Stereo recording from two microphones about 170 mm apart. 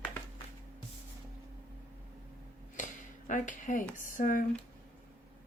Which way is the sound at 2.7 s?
50° left (ahead or behind).